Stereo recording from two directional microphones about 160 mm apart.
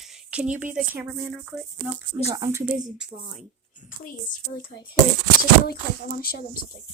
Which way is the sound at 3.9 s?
60° left (ahead or behind).